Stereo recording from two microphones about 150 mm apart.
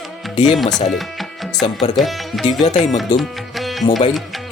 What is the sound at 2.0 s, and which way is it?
Speech, centre (ahead or behind).